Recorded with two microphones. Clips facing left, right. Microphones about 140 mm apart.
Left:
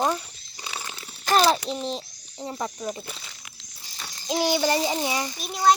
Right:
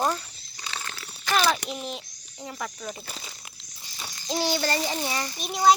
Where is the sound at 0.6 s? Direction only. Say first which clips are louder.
Left 1 dB; 15° left (ahead or behind).